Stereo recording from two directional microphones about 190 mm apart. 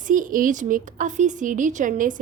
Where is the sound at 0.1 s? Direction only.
45° right (ahead or behind).